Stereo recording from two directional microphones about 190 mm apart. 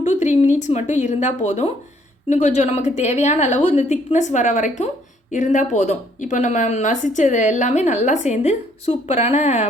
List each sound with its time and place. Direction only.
0.0 s speech: 40° left (ahead or behind)